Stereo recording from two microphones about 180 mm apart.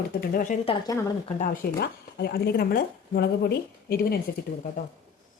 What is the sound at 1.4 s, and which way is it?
Speech, 55° left (ahead or behind).